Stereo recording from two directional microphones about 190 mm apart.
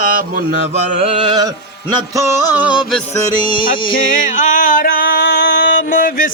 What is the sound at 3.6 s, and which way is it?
Music, 45° left (ahead or behind).